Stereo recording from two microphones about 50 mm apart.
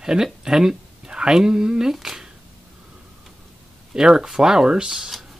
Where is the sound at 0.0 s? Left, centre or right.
Centre.